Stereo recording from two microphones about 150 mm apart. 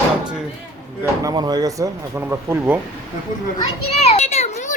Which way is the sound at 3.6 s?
45° left (ahead or behind).